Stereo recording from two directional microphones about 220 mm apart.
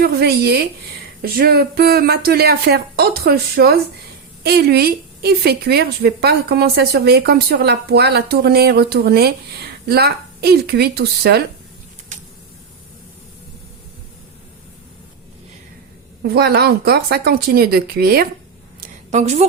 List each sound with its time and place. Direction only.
0.0 s a woman's voice: 45° right (ahead or behind)
16.2 s a woman's voice: 45° right (ahead or behind)
19.1 s a woman's voice: 30° right (ahead or behind)